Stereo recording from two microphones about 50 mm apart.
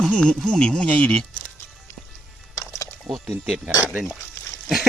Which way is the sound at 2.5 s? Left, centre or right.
Left.